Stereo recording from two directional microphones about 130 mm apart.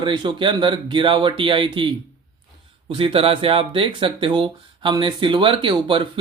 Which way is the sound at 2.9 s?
45° right (ahead or behind).